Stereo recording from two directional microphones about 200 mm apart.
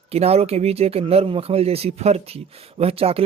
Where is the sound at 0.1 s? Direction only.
30° right (ahead or behind).